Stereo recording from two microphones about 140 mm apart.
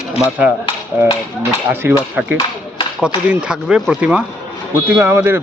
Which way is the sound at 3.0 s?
5° right (ahead or behind).